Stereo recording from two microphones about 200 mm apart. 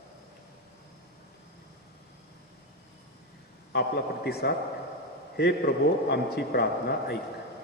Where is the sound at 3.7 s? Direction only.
55° left (ahead or behind).